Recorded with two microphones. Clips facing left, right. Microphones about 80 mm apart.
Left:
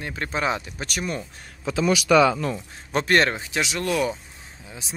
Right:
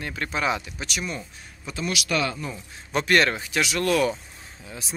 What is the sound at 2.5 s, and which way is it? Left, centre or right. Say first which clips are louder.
Speech: left 2 dB; left.